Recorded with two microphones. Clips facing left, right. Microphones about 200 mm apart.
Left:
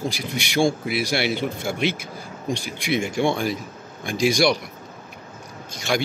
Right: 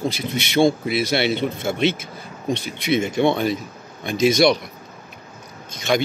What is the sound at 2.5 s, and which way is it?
Speech, 20° right (ahead or behind).